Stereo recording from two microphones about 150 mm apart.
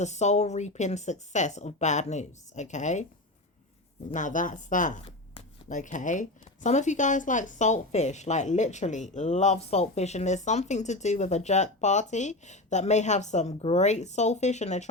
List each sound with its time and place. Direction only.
0.0 s speech: 50° left (ahead or behind)
4.1 s a woman's voice: 60° left (ahead or behind)